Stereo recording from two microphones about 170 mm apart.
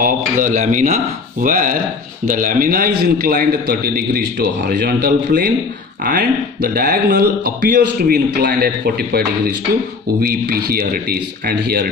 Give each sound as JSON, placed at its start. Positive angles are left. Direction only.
{"t": 0.0, "sound": "speech", "side_deg": -50}